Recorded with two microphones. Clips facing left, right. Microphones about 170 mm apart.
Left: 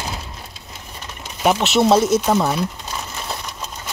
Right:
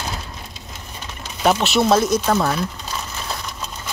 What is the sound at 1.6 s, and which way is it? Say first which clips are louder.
Speech: left 4 dB; 20° left (ahead or behind).